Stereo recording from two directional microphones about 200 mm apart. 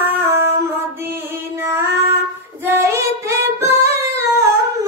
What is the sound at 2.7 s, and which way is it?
Singing, 15° right (ahead or behind).